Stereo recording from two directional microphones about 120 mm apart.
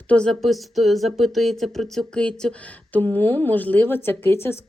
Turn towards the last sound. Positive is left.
turn(degrees=20)  # may be behind; listen again after turning